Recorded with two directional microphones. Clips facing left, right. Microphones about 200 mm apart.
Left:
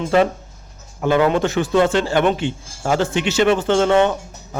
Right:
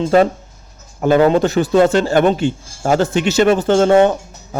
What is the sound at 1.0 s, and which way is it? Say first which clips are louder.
A man's voice: right 4 dB; 40° right (ahead or behind).